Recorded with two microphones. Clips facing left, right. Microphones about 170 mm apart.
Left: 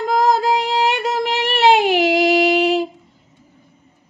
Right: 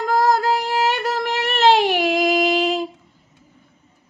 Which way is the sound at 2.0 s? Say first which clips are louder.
Left 3 dB; 70° left (ahead or behind).